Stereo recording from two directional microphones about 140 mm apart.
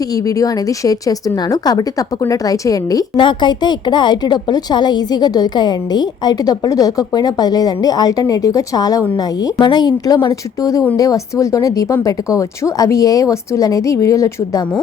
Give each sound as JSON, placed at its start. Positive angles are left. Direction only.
{"t": 0.0, "sound": "a woman's voice", "side_deg": 25}